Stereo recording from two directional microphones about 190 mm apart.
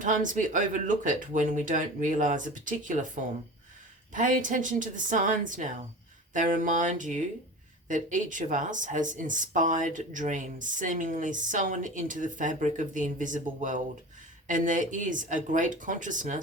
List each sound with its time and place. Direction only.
0.0 s speech: 45° right (ahead or behind)
4.1 s speech: 40° right (ahead or behind)